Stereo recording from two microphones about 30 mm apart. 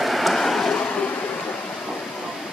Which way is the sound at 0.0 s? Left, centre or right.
Centre.